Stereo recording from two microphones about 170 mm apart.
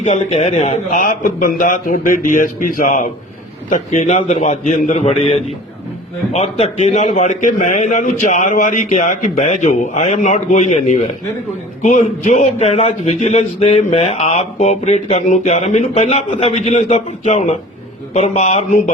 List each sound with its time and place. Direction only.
0.0 s a man's voice: 40° left (ahead or behind)